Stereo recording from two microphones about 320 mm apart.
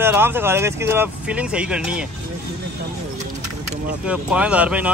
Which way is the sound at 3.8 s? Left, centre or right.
Centre.